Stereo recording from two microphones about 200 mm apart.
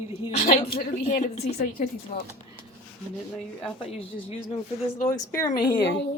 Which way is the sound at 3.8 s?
30° left (ahead or behind).